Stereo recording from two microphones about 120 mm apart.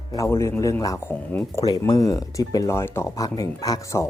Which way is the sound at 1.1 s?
15° left (ahead or behind).